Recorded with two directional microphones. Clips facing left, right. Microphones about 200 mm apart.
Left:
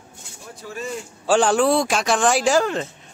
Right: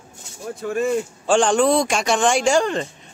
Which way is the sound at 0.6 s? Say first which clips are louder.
Right 10 dB; 55° right (ahead or behind).